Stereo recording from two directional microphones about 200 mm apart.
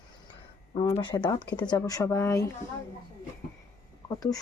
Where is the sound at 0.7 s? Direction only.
25° left (ahead or behind).